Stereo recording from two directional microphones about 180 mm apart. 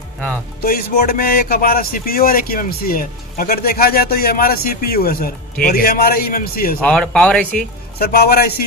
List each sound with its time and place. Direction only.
0.6 s speech: 55° left (ahead or behind)
6.8 s speech: 5° left (ahead or behind)
7.9 s speech: 60° left (ahead or behind)